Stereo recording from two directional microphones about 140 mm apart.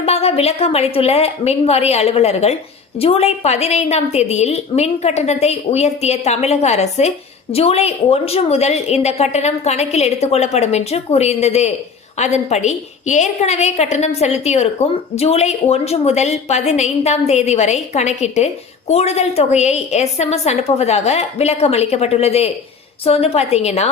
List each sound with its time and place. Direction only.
0.0 s a woman's voice: 45° left (ahead or behind)